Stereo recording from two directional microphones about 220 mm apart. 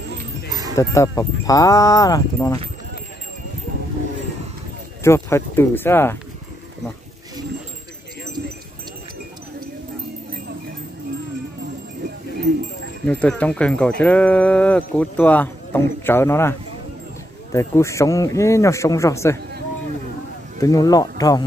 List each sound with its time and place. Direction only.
0.5 s livestock: 15° right (ahead or behind)
0.7 s speech: 15° left (ahead or behind)
5.0 s speech: 10° left (ahead or behind)
13.0 s speech: 5° left (ahead or behind)
20.6 s speech: 15° left (ahead or behind)